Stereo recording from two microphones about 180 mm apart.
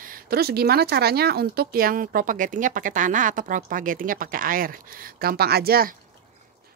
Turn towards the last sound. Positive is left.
turn(degrees=-55)  # may be behind; listen again after turning